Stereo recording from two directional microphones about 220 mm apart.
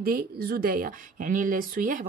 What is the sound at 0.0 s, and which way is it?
A woman's voice, 45° right (ahead or behind).